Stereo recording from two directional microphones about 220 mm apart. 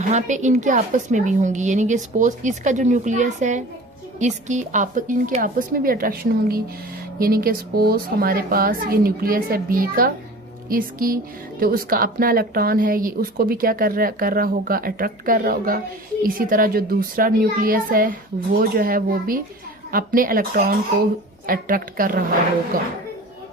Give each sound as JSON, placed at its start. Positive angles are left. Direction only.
{"t": 0.1, "sound": "a woman's voice", "side_deg": -30}